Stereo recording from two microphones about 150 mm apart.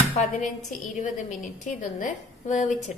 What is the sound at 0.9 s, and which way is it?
A woman's voice, 55° left (ahead or behind).